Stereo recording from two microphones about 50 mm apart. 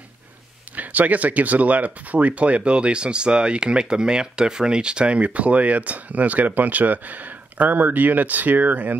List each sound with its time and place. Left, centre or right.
0.7 s speech: right